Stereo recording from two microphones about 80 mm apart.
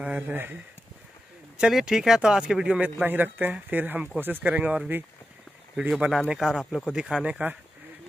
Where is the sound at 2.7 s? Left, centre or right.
Centre.